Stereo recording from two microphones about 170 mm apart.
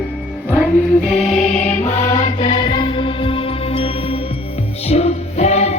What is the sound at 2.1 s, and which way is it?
Music, 30° left (ahead or behind).